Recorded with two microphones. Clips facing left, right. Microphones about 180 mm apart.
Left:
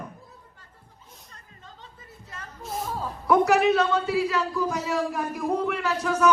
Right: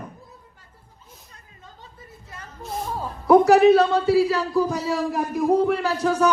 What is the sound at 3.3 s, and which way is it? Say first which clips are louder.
A man's voice: right 7 dB; 35° right (ahead or behind).